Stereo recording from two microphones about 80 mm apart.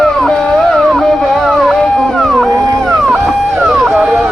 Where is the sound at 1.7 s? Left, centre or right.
Centre.